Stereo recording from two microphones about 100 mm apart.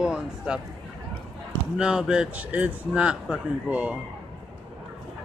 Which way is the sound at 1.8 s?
5° right (ahead or behind).